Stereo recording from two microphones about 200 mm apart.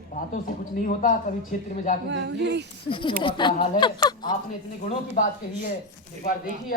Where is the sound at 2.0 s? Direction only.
60° right (ahead or behind).